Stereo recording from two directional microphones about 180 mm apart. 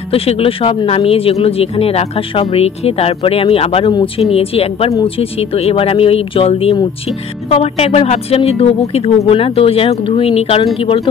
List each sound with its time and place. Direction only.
0.1 s speech: 30° left (ahead or behind)